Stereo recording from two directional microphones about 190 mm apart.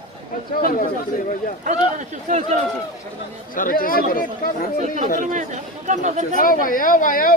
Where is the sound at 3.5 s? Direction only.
45° left (ahead or behind).